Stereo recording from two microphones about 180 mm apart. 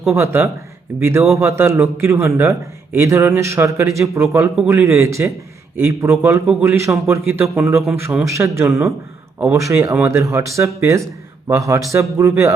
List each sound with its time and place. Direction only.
0.1 s a man's voice: 15° right (ahead or behind)
8.0 s a man's voice: 15° right (ahead or behind)